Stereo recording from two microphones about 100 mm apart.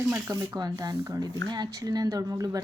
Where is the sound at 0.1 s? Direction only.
40° right (ahead or behind).